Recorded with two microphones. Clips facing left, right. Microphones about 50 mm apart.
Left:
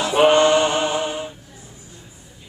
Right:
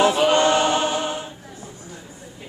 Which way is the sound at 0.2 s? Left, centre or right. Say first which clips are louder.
Left 3 dB; left.